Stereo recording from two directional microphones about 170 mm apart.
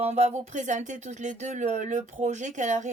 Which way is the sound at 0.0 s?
40° right (ahead or behind).